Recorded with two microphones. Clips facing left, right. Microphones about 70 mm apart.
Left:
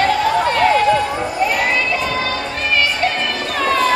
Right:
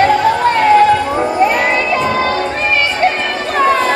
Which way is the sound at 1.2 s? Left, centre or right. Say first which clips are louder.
Right 6 dB; right.